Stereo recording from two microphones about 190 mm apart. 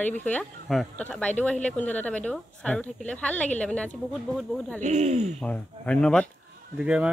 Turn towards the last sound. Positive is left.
turn(degrees=-5)  # may be behind; listen again after turning